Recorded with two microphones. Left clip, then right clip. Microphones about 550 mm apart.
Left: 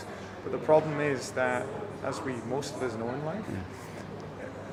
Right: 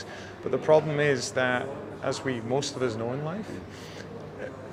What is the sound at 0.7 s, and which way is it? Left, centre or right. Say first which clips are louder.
Speech: right 3 dB; right.